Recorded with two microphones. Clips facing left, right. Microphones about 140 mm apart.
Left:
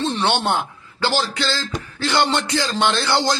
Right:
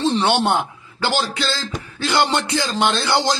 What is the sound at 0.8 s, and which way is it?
Speech, 20° right (ahead or behind).